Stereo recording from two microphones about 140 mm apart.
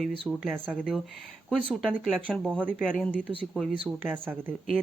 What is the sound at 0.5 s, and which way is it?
Speech, 15° right (ahead or behind).